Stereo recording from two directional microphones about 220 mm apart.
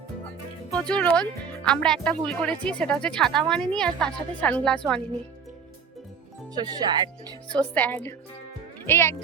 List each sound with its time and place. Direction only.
0.7 s speech: 5° left (ahead or behind)
6.5 s speech: 20° right (ahead or behind)
7.7 s a woman's voice: 5° left (ahead or behind)